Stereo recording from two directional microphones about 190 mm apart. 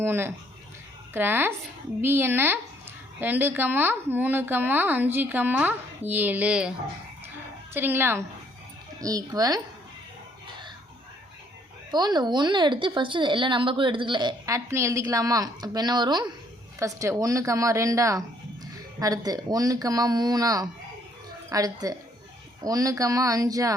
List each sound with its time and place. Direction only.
0.0 s a woman's voice: 10° right (ahead or behind)
11.9 s a woman's voice: 20° right (ahead or behind)